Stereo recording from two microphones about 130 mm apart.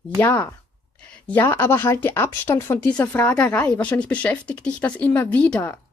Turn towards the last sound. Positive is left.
turn(degrees=10)  # may be behind; listen again after turning